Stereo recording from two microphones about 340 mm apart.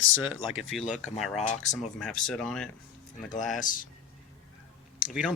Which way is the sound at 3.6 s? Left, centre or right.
Left.